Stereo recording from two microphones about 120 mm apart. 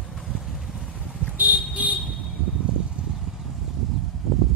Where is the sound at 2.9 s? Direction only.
10° right (ahead or behind).